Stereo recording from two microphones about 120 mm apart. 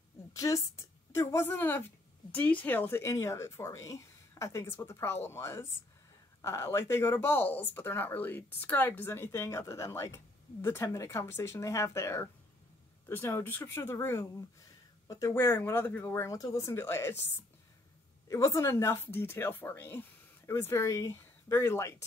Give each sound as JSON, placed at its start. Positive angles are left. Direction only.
{"t": 0.3, "sound": "a woman's voice", "side_deg": 25}
{"t": 18.3, "sound": "speech", "side_deg": 25}